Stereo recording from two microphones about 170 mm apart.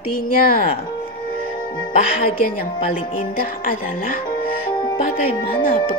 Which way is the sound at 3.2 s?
55° left (ahead or behind).